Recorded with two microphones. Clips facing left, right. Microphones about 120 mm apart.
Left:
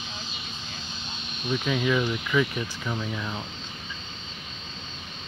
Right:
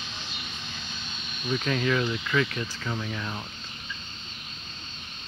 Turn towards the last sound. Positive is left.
turn(degrees=15)  # may be behind; listen again after turning